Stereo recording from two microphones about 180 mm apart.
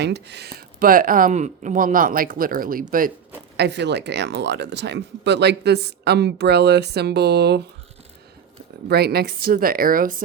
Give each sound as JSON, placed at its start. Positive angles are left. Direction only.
{"t": 0.0, "sound": "speech", "side_deg": -70}
{"t": 3.6, "sound": "speech", "side_deg": -75}
{"t": 8.9, "sound": "speech", "side_deg": -60}